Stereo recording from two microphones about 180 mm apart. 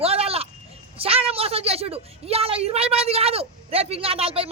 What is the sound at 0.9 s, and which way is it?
A woman's voice, 30° right (ahead or behind).